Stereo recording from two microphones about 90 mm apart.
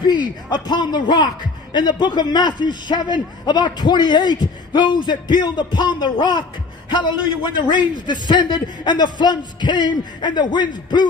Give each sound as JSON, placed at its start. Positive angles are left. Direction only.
{"t": 0.0, "sound": "a man's voice", "side_deg": 50}